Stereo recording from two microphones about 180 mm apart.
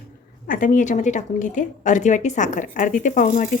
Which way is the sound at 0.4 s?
50° left (ahead or behind).